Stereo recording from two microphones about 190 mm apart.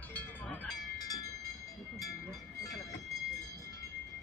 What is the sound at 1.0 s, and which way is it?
Train, 20° left (ahead or behind).